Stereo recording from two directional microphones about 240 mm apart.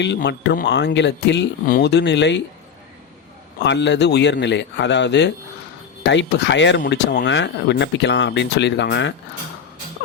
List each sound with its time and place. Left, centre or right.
0.0 s speech: left
3.6 s speech: left